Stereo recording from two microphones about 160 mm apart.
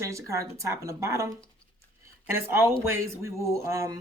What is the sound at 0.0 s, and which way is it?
Speech, 20° right (ahead or behind).